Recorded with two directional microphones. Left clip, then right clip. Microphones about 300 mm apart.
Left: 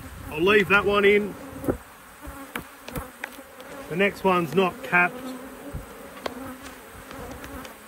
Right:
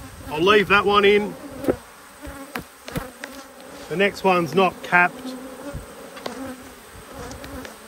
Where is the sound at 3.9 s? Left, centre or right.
Centre.